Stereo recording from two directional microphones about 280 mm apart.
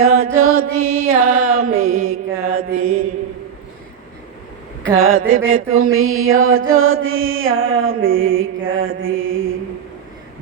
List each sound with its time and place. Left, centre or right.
0.0 s mantra: right
4.9 s mantra: right